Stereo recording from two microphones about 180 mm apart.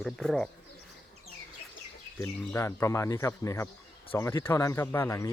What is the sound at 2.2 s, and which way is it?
Speech, 15° left (ahead or behind).